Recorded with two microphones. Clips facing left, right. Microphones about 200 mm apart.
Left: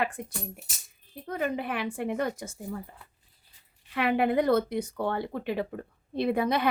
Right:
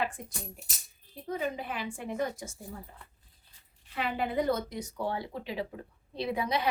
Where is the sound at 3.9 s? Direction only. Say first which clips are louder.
Left 6 dB; 65° left (ahead or behind).